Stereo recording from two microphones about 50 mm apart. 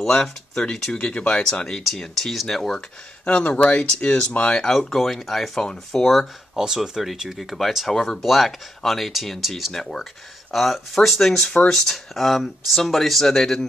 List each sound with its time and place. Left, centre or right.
0.0 s speech: centre
1.4 s speech: centre
3.3 s speech: left
4.9 s speech: centre
6.5 s speech: centre